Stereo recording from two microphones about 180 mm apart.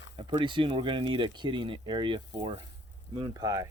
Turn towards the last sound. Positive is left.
turn(degrees=-20)  # may be behind; listen again after turning